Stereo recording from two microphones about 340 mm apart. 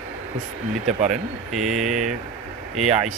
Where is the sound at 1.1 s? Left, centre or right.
Centre.